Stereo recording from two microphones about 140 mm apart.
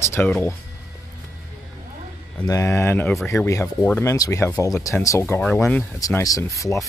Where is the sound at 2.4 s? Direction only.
25° left (ahead or behind).